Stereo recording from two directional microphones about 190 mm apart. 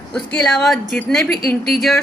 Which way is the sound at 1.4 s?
55° left (ahead or behind).